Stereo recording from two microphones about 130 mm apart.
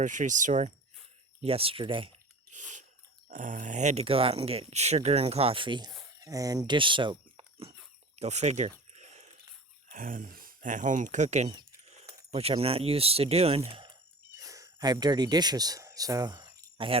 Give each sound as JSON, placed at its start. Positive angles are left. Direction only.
{"t": 0.0, "sound": "speech", "side_deg": -75}
{"t": 1.4, "sound": "speech", "side_deg": -45}
{"t": 2.5, "sound": "a sound", "side_deg": -70}
{"t": 3.2, "sound": "speech", "side_deg": -85}
{"t": 4.0, "sound": "speech", "side_deg": -45}
{"t": 6.1, "sound": "speech", "side_deg": -25}
{"t": 8.1, "sound": "speech", "side_deg": -55}
{"t": 8.9, "sound": "a sound", "side_deg": -60}
{"t": 9.9, "sound": "speech", "side_deg": -90}
{"t": 12.3, "sound": "speech", "side_deg": -50}
{"t": 13.7, "sound": "speech", "side_deg": -40}
{"t": 14.3, "sound": "speech", "side_deg": -25}
{"t": 16.7, "sound": "speech", "side_deg": -45}